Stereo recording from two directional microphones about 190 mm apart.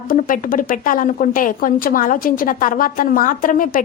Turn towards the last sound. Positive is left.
turn(degrees=45)  # may be behind; listen again after turning